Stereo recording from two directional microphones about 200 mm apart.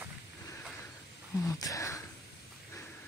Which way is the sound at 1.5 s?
15° left (ahead or behind).